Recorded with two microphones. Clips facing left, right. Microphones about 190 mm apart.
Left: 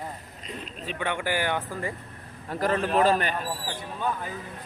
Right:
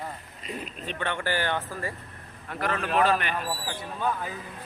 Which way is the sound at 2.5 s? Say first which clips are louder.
Left 4 dB; 35° left (ahead or behind).